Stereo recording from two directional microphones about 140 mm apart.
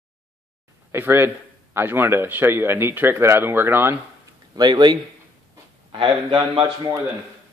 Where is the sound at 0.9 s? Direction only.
15° right (ahead or behind).